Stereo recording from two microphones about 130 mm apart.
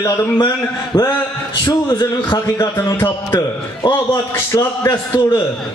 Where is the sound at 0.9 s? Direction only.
30° left (ahead or behind).